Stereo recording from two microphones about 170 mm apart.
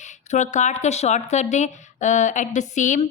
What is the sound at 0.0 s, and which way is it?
Speech, 45° left (ahead or behind).